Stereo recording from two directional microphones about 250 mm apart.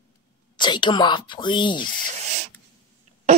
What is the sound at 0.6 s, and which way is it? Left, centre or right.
Speech, centre.